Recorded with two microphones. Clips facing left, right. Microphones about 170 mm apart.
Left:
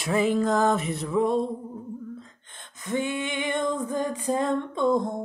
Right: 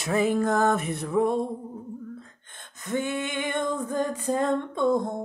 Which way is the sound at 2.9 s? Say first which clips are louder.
Even; 45° right (ahead or behind).